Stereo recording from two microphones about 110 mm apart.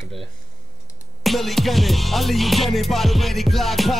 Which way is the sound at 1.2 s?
Centre (ahead or behind).